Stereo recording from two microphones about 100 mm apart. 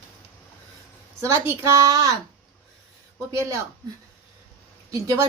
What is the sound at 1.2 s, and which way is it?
Speech, 25° right (ahead or behind).